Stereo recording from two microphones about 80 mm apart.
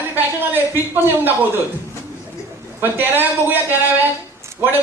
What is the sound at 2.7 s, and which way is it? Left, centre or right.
Speech, right.